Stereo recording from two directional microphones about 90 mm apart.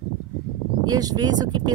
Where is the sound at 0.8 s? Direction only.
45° right (ahead or behind).